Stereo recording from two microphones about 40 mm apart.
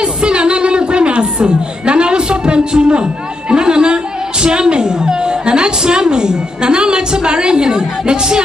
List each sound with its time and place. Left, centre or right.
0.0 s speech: right